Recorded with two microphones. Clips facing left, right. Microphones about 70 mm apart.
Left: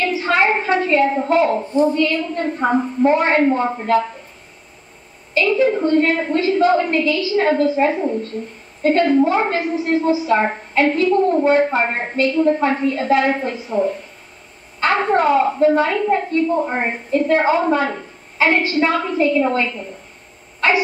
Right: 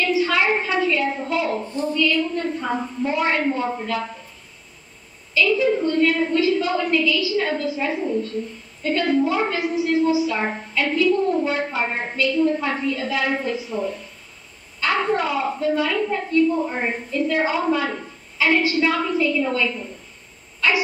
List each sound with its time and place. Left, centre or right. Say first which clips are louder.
0.0 s a woman's voice: left 3 dB; left
5.3 s a woman's voice: left 3 dB; left